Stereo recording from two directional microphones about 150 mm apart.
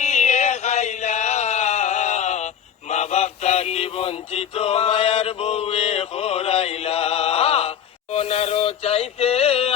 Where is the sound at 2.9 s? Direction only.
45° left (ahead or behind).